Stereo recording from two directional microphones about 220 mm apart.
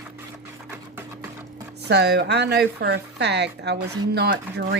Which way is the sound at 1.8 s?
50° right (ahead or behind).